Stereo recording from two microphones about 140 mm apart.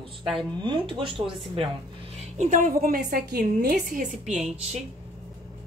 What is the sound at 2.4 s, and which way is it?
A woman's voice, 70° right (ahead or behind).